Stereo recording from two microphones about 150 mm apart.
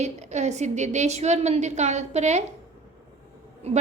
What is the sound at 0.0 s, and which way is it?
A woman's voice, 50° right (ahead or behind).